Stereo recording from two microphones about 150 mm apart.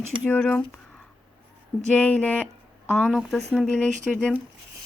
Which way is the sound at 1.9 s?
10° left (ahead or behind).